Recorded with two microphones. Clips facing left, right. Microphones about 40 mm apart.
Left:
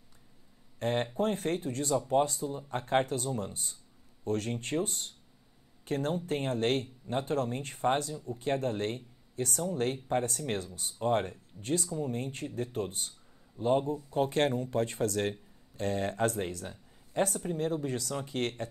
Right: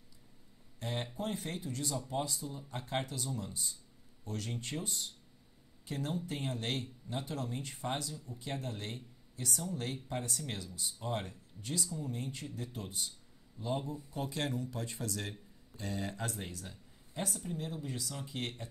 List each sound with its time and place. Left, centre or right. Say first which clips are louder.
0.7 s speech: left 9 dB; left